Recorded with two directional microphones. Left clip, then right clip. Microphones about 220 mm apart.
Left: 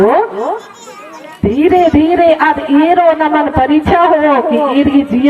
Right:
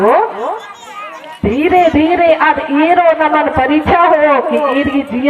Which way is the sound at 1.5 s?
45° left (ahead or behind).